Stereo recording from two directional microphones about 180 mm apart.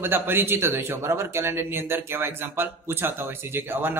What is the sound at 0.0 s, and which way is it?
Speech, 10° right (ahead or behind).